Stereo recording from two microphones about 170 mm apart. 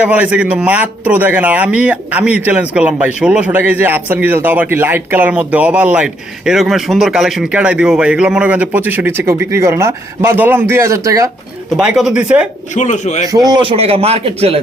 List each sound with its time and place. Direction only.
0.0 s speech: 10° right (ahead or behind)
11.8 s speech: 5° right (ahead or behind)
12.7 s speech: 45° left (ahead or behind)
13.2 s a man's voice: 20° right (ahead or behind)